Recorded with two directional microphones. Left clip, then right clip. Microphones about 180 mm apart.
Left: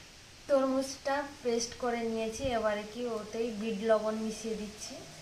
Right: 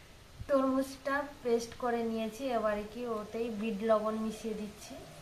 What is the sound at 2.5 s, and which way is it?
Speech, 20° left (ahead or behind).